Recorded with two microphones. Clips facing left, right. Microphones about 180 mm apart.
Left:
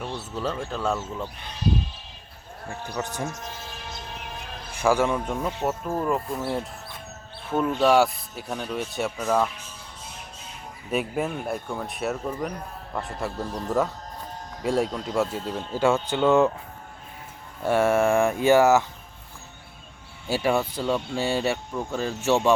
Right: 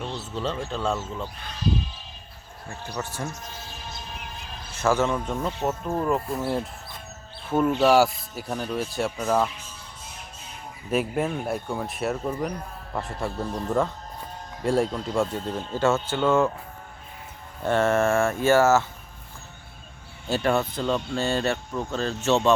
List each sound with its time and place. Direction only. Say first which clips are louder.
0.3 s speech: even; 5° left (ahead or behind)
3.0 s speech: left 2 dB; 15° left (ahead or behind)
4.7 s speech: left 1 dB; 10° left (ahead or behind)
5.9 s speech: right 1 dB; centre (ahead or behind)
7.8 s speech: left 1 dB; centre (ahead or behind)
10.9 s speech: right 2 dB; centre (ahead or behind); by 16.5 s 15° left (ahead or behind)
17.6 s speech: left 1 dB; 10° left (ahead or behind)
20.2 s speech: even; 10° left (ahead or behind)